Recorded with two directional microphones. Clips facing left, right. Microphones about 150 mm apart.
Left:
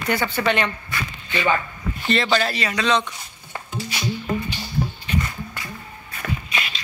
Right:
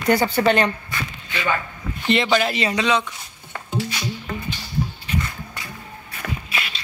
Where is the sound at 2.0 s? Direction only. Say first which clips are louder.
Right 2 dB; 15° right (ahead or behind).